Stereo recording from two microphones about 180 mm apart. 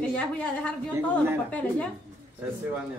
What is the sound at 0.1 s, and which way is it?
Speech, 5° left (ahead or behind).